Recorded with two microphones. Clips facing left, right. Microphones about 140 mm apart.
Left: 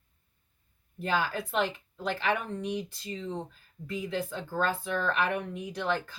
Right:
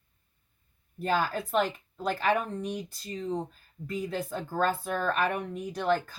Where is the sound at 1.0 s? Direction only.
45° right (ahead or behind).